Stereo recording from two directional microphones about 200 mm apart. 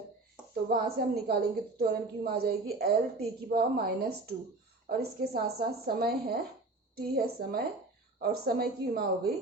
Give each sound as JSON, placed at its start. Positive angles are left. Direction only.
{"t": 0.7, "sound": "a woman's voice", "side_deg": -50}